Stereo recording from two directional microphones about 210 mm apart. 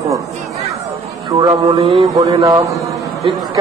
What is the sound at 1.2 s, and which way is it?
A man's voice, 15° right (ahead or behind).